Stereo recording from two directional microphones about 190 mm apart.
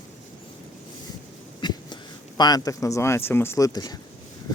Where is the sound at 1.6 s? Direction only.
25° left (ahead or behind).